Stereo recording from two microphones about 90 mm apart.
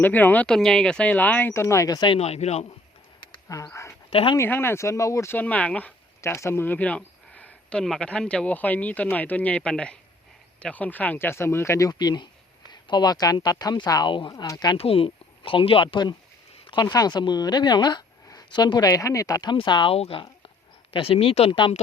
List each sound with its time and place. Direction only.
0.0 s speech: 20° left (ahead or behind)
0.4 s speech: 5° left (ahead or behind); by 2.0 s 35° left (ahead or behind)
3.5 s speech: 35° left (ahead or behind)
4.1 s speech: 90° left
4.4 s speech: 25° left (ahead or behind)
5.4 s speech: 15° left (ahead or behind)
6.2 s speech: 30° left (ahead or behind)
6.7 s speech: 15° left (ahead or behind); by 14.4 s 60° left (ahead or behind)
14.4 s speech: 50° left (ahead or behind)
14.8 s speech: 90° left; by 19.5 s 45° left (ahead or behind)
19.5 s speech: 60° left (ahead or behind); by 21.7 s 85° left